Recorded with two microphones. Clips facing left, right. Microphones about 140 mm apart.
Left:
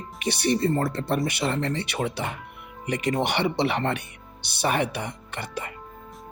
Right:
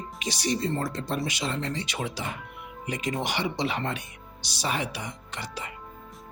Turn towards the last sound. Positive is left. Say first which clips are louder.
# left 4 dB
turn(degrees=55)  # may be behind; listen again after turning